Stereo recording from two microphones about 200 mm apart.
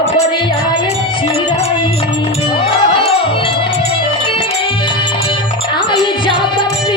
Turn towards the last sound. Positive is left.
turn(degrees=25)  # may be behind; listen again after turning